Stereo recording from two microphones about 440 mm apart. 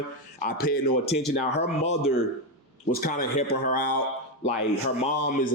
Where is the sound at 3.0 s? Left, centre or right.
Centre.